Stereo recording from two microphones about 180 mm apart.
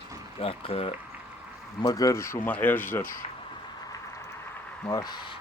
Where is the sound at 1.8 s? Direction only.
20° left (ahead or behind).